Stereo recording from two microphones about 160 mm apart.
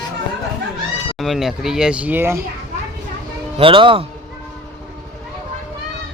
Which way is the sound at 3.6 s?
30° right (ahead or behind).